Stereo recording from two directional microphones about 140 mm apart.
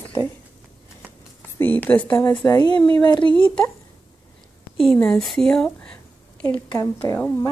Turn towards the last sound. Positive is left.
turn(degrees=20)  # may be behind; listen again after turning